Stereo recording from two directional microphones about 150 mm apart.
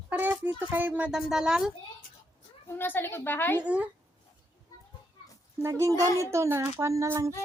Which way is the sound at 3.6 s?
10° right (ahead or behind).